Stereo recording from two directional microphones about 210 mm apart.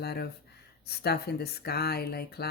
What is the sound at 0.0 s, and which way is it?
Speech, 50° left (ahead or behind).